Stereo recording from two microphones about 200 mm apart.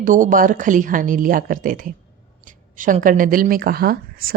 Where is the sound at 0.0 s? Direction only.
40° right (ahead or behind).